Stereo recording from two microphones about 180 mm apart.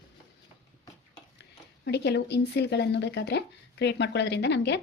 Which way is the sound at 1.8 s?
70° left (ahead or behind).